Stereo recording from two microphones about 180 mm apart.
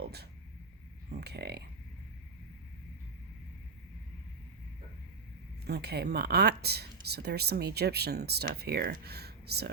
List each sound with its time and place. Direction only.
0.0 s a sound: 65° right (ahead or behind)
1.1 s speech: 65° right (ahead or behind)
5.6 s speech: 65° right (ahead or behind)